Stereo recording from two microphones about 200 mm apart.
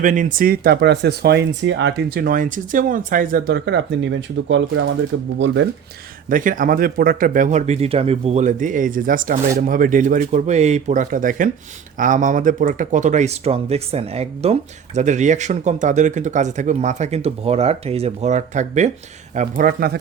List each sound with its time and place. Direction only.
0.0 s speech: 40° right (ahead or behind); by 4.9 s 70° right (ahead or behind)
5.1 s speech: 90° right
6.2 s speech: 40° right (ahead or behind)